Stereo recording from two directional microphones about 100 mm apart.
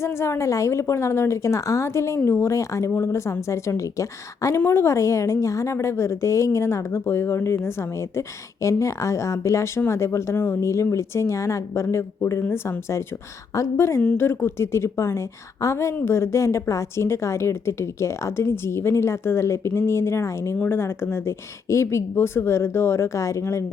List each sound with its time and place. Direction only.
0.0 s a woman's voice: 25° left (ahead or behind)